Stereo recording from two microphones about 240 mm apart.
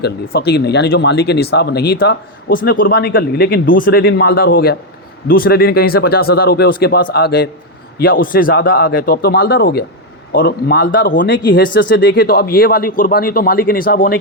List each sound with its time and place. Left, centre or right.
0.0 s speech: left